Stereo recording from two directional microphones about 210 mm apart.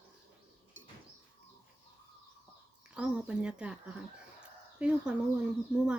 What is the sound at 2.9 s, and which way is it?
Speech, 5° right (ahead or behind).